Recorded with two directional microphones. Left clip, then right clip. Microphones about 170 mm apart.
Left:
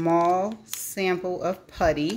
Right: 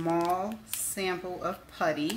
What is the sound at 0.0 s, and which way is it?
Speech, 40° left (ahead or behind).